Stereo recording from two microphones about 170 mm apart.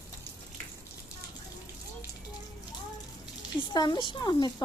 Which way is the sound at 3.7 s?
25° left (ahead or behind).